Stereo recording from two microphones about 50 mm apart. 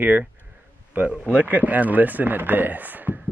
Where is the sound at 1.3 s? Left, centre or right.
Right.